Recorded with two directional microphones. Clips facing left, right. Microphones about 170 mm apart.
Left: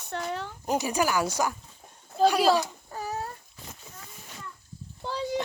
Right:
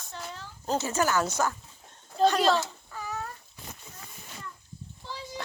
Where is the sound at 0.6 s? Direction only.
15° left (ahead or behind).